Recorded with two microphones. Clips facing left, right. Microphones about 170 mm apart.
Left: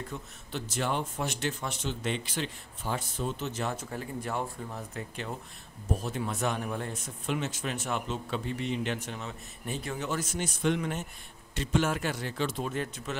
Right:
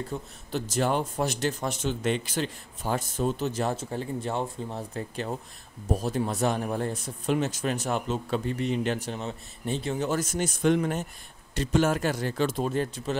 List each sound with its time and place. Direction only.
0.1 s speech: 40° right (ahead or behind)
10.0 s speech: 45° right (ahead or behind)